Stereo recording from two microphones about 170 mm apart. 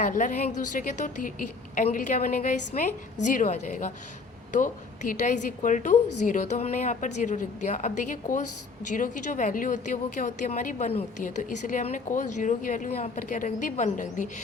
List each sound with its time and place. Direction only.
0.0 s a woman's voice: 50° left (ahead or behind)